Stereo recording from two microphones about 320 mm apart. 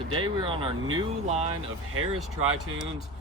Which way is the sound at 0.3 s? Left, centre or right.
Centre.